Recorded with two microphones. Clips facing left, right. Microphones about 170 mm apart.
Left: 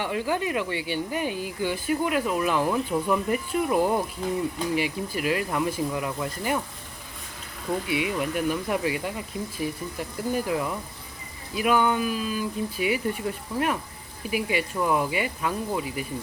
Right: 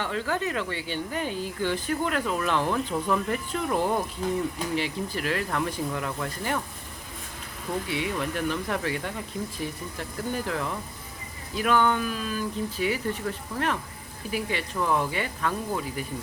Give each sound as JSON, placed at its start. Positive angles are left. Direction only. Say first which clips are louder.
{"t": 0.0, "sound": "speech", "louder": "left 2 dB", "side_deg": 15}
{"t": 7.9, "sound": "speech", "louder": "left 3 dB", "side_deg": 10}